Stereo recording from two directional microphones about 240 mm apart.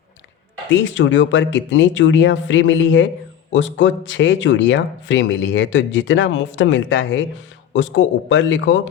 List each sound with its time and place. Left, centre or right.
0.7 s speech: left